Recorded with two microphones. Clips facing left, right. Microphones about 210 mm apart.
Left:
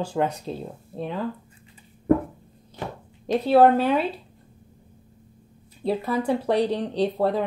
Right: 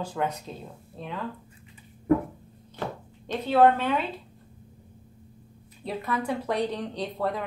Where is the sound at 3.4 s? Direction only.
35° left (ahead or behind).